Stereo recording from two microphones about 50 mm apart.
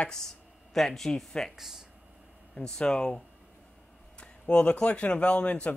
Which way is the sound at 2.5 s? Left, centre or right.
Centre.